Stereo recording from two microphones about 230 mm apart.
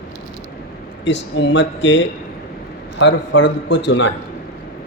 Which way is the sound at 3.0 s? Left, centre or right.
Left.